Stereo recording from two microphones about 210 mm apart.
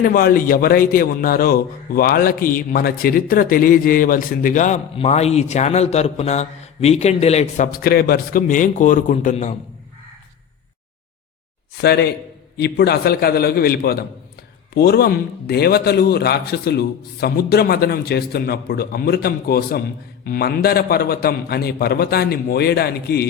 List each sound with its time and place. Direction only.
0.0 s a man's voice: 45° left (ahead or behind)
11.8 s a man's voice: 50° left (ahead or behind)